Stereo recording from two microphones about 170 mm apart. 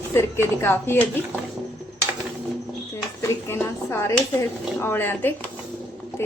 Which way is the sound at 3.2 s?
15° left (ahead or behind).